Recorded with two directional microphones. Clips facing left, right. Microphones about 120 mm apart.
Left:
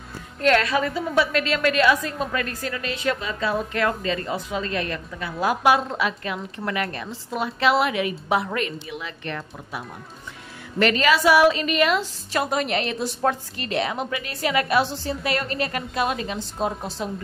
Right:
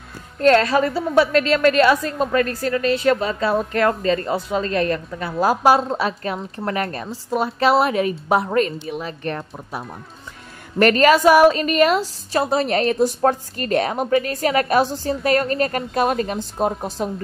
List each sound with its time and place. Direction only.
0.4 s a woman's voice: 35° right (ahead or behind)